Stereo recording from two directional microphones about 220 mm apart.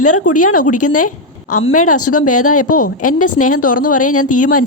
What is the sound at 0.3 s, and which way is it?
A woman's voice, 90° left.